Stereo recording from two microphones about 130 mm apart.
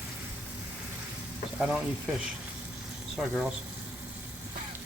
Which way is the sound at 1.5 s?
5° right (ahead or behind).